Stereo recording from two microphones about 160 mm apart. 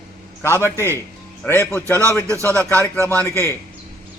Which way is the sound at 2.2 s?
20° right (ahead or behind).